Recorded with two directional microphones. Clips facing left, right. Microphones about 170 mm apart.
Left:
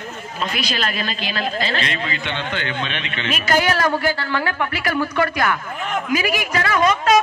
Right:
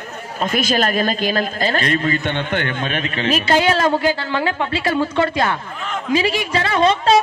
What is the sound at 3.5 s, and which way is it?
A man's voice, 25° right (ahead or behind).